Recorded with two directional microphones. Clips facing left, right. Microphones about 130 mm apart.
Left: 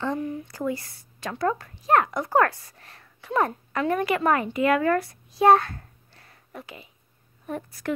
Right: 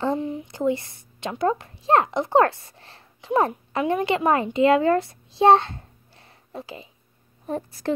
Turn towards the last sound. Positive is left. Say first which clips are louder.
# right 4 dB
turn(degrees=-30)  # may be behind; listen again after turning